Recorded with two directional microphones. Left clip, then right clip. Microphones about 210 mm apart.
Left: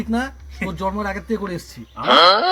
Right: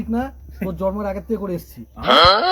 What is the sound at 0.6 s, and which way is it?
Speech, 45° left (ahead or behind).